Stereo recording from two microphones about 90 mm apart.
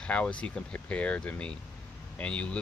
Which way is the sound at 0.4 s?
15° left (ahead or behind).